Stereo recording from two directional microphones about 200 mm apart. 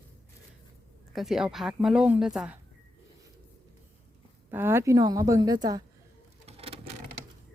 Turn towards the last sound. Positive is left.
turn(degrees=-30)  # may be behind; listen again after turning